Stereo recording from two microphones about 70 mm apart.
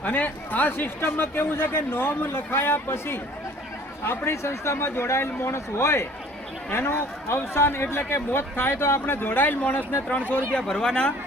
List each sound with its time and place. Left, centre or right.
0.0 s speech: left
10.5 s speech: centre